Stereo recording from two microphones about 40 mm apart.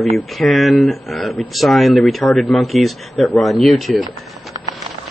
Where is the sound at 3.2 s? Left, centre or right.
Centre.